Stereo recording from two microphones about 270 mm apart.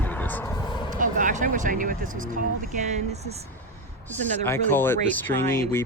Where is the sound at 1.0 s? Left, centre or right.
Right.